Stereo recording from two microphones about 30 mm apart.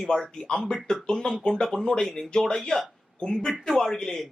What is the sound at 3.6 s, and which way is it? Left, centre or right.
Speech, centre.